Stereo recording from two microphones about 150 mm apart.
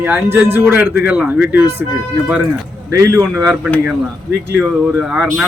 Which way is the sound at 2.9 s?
20° right (ahead or behind).